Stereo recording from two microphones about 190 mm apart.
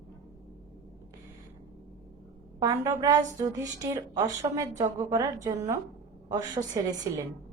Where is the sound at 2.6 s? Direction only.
15° right (ahead or behind).